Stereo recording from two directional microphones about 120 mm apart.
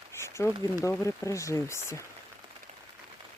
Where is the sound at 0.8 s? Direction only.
25° left (ahead or behind).